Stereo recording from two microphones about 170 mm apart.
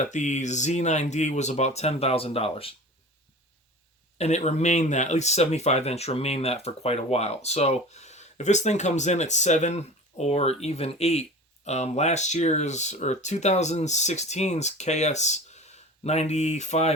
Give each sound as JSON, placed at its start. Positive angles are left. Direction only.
{"t": 0.0, "sound": "speech", "side_deg": 45}
{"t": 4.2, "sound": "speech", "side_deg": 40}